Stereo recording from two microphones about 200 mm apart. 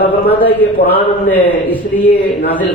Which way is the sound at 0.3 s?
10° left (ahead or behind).